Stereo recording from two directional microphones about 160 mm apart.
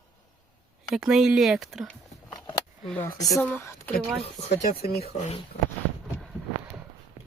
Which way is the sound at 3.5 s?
20° left (ahead or behind).